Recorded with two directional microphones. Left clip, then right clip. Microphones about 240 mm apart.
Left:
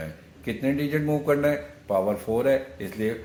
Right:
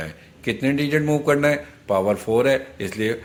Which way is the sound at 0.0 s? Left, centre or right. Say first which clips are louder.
Right 6 dB; right.